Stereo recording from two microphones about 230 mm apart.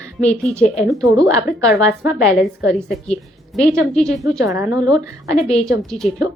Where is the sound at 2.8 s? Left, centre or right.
Centre.